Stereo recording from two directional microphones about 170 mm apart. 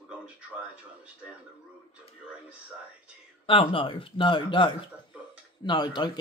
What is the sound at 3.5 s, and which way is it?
Speech, 30° left (ahead or behind).